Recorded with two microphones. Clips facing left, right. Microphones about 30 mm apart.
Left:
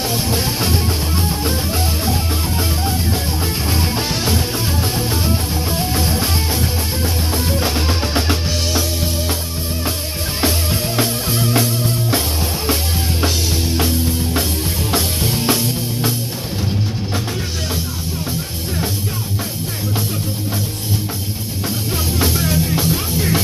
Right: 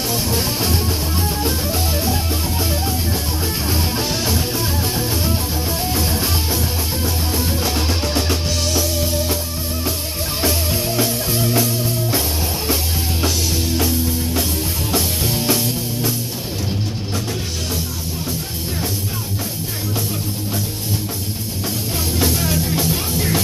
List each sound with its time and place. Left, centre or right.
0.1 s music: centre
3.6 s music: centre
11.5 s music: left
13.7 s music: left
15.0 s music: centre
22.2 s music: centre